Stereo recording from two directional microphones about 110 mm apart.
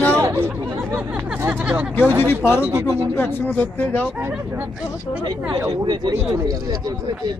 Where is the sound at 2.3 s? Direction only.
20° left (ahead or behind).